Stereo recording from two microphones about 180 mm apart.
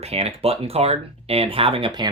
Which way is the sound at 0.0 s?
35° right (ahead or behind).